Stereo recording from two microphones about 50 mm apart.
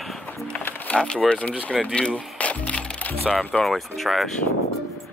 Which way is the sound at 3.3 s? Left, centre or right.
Centre.